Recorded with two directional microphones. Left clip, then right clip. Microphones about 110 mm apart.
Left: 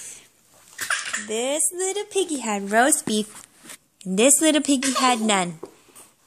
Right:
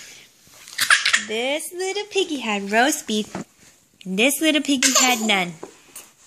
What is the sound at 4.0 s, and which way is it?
Speech, 20° left (ahead or behind).